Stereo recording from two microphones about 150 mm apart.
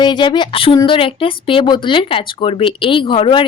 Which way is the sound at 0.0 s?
30° left (ahead or behind).